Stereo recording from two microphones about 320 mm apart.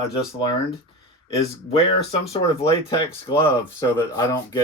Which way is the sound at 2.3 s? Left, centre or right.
Centre.